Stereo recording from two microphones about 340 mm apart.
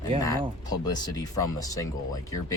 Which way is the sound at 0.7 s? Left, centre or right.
Centre.